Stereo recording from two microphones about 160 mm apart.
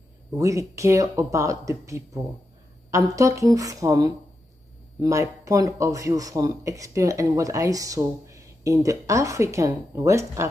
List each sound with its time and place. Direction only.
0.4 s speech: 20° right (ahead or behind)